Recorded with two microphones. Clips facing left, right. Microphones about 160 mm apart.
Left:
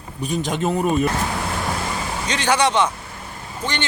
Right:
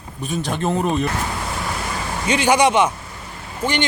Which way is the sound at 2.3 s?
10° right (ahead or behind).